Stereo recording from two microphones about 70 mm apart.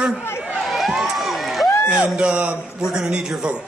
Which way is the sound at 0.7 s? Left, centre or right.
Centre.